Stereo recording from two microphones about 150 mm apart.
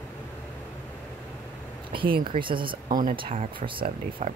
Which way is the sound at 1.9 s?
35° right (ahead or behind).